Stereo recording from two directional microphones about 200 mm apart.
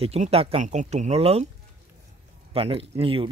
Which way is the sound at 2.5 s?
30° right (ahead or behind).